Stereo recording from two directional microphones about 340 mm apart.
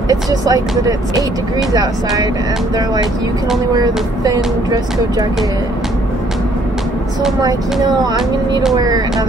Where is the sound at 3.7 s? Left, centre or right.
Centre.